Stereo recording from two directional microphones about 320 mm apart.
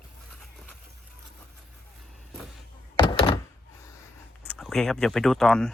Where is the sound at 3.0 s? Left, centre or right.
Centre.